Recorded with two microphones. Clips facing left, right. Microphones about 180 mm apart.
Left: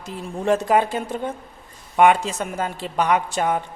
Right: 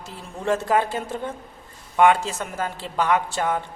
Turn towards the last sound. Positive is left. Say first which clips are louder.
# left 2 dB
turn(degrees=20)  # may be behind; listen again after turning